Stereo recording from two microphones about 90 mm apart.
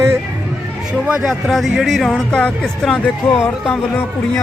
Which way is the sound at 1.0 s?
10° right (ahead or behind).